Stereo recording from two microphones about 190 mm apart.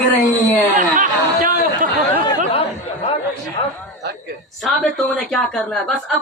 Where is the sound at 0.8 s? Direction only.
45° right (ahead or behind).